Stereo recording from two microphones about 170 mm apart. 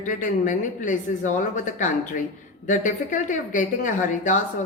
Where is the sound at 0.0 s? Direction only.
50° left (ahead or behind).